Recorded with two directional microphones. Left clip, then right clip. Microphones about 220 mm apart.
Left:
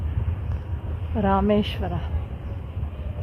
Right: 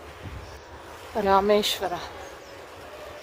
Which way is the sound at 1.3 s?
25° right (ahead or behind).